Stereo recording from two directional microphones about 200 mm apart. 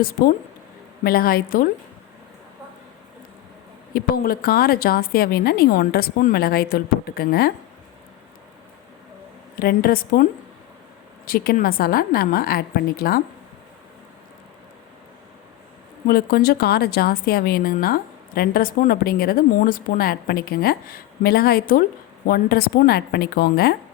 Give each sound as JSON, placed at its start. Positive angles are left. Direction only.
{"t": 1.0, "sound": "a woman's voice", "side_deg": 50}
{"t": 3.9, "sound": "a woman's voice", "side_deg": 45}
{"t": 9.6, "sound": "a woman's voice", "side_deg": 45}
{"t": 11.3, "sound": "a woman's voice", "side_deg": 45}
{"t": 16.0, "sound": "a woman's voice", "side_deg": 45}